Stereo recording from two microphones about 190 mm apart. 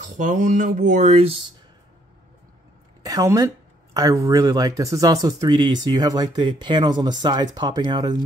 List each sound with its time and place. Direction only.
0.0 s speech: 45° right (ahead or behind)
3.0 s speech: 20° right (ahead or behind)